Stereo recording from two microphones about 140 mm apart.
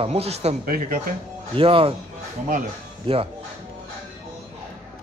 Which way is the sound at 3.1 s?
40° right (ahead or behind).